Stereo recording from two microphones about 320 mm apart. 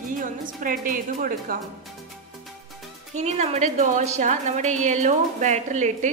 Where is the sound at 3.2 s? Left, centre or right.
Right.